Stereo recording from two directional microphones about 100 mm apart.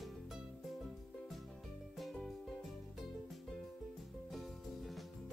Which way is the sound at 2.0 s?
Centre (ahead or behind).